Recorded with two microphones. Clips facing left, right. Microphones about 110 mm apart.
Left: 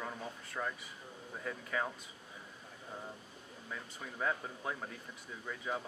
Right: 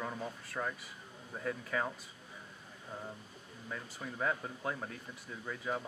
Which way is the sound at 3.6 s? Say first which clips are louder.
Right 3 dB; 5° right (ahead or behind).